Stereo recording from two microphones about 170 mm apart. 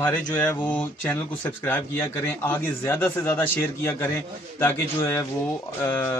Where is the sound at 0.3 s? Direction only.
10° left (ahead or behind).